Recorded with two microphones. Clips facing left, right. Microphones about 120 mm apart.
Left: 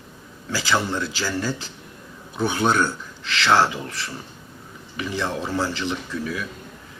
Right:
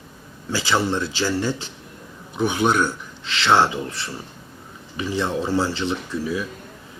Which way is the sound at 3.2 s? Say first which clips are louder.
Right 1 dB; 25° right (ahead or behind).